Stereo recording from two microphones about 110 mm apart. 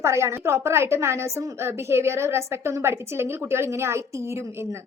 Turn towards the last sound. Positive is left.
turn(degrees=-25)  # may be behind; listen again after turning